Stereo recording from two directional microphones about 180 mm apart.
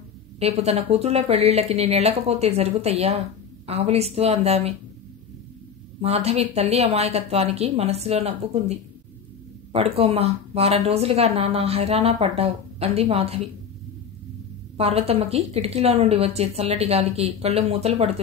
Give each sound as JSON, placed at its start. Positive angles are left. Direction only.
{"t": 0.4, "sound": "a woman's voice", "side_deg": -35}
{"t": 5.9, "sound": "a woman's voice", "side_deg": -35}
{"t": 14.8, "sound": "a woman's voice", "side_deg": -35}